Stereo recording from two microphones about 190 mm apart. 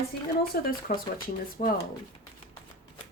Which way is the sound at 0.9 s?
45° left (ahead or behind).